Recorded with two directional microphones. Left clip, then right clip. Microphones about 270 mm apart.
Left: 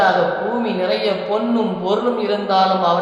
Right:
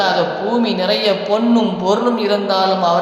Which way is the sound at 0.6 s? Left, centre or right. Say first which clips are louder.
Right 3 dB; right.